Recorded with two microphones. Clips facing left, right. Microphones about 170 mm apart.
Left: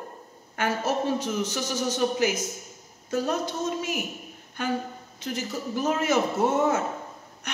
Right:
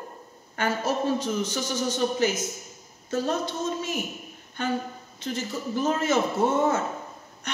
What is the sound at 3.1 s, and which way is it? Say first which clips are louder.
Speech: even; 30° right (ahead or behind).